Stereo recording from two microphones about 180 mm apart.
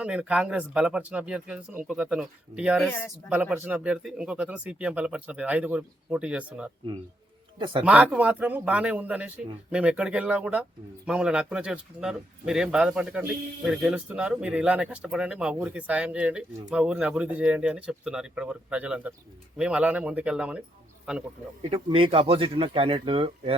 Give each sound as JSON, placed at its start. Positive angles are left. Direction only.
{"t": 0.0, "sound": "speech", "side_deg": -5}
{"t": 7.6, "sound": "speech", "side_deg": -25}
{"t": 7.9, "sound": "speech", "side_deg": -5}
{"t": 21.7, "sound": "speech", "side_deg": -30}